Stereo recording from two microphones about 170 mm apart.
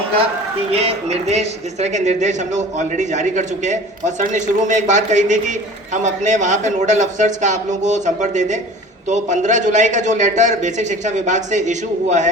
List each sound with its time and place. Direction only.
0.7 s a woman's voice: 35° right (ahead or behind)